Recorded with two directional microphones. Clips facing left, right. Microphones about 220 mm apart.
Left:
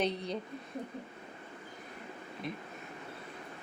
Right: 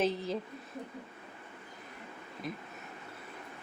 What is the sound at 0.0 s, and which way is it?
Speech, centre (ahead or behind).